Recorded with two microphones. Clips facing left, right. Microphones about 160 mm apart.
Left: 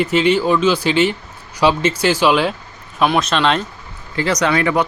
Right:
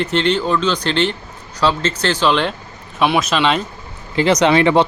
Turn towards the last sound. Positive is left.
turn(degrees=-25)  # may be behind; listen again after turning